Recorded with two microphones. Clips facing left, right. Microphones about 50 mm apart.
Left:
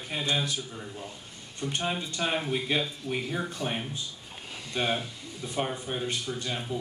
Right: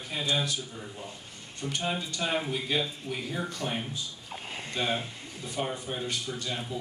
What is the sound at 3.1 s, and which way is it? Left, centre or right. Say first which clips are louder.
Speech: left 3 dB; centre.